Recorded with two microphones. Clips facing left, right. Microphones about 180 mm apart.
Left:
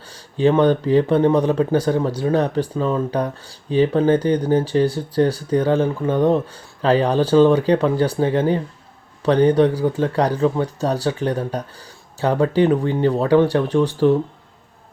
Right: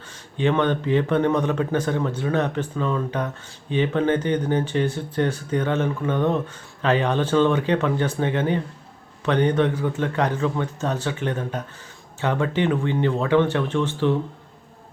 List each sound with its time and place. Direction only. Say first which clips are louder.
0.1 s speech: left 5 dB; 35° left (ahead or behind)